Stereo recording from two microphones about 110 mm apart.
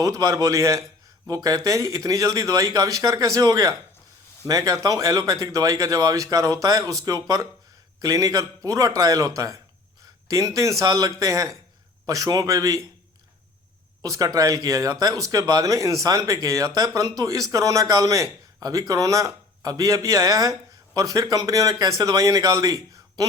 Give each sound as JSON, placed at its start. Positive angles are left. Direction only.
{"t": 0.0, "sound": "a man's voice", "side_deg": -30}
{"t": 14.0, "sound": "a man's voice", "side_deg": -35}